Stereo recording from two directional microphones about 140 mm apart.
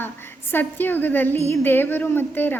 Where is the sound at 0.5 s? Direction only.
15° left (ahead or behind).